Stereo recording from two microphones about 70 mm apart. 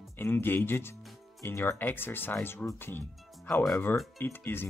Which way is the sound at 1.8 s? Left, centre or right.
Left.